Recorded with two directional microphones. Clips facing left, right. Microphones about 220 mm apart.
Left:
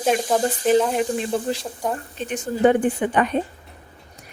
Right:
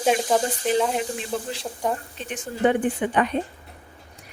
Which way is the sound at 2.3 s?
45° left (ahead or behind).